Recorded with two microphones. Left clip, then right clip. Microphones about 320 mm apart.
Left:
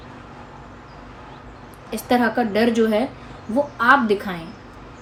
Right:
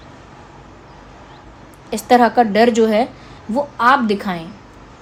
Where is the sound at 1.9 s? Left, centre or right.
Right.